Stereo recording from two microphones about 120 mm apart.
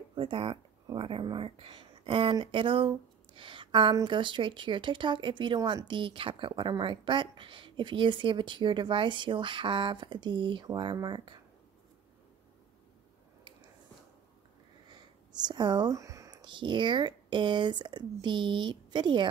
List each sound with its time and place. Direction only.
0.1 s speech: 45° right (ahead or behind)
14.9 s a sound: 35° right (ahead or behind)
16.3 s speech: 40° right (ahead or behind)